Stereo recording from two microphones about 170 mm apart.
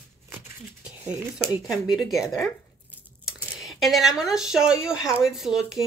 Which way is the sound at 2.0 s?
Centre (ahead or behind).